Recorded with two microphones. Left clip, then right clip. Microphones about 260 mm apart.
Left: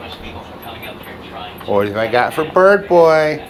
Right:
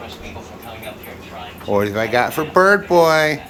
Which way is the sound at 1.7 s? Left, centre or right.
Right.